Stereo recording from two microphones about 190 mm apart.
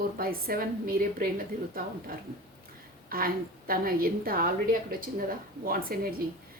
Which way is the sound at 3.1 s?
50° right (ahead or behind).